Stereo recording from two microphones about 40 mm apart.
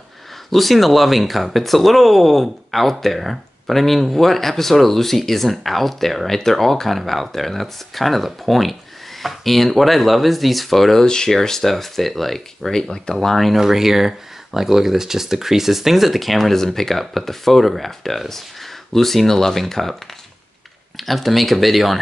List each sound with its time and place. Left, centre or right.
0.5 s speech: centre
11.1 s speech: centre
13.6 s speech: centre